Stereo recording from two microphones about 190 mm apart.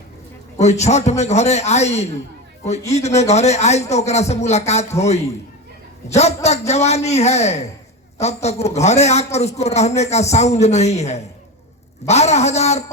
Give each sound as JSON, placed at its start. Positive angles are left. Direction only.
{"t": 0.6, "sound": "a man's voice", "side_deg": 35}